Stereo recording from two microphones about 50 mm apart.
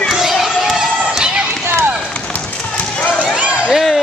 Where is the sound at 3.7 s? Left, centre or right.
Centre.